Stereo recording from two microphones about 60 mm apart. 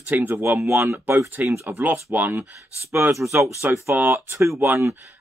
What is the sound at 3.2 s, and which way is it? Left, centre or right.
Speech, right.